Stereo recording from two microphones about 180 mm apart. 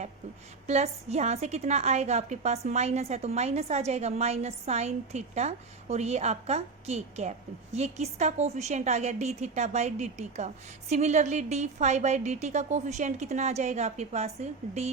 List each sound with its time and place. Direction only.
0.7 s a woman's voice: 40° right (ahead or behind)